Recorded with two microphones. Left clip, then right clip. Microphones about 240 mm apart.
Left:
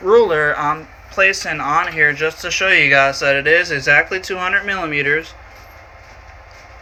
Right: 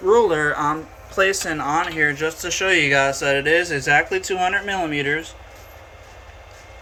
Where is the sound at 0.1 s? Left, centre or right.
Centre.